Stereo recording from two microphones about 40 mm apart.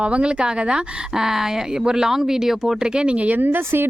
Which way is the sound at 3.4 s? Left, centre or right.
Right.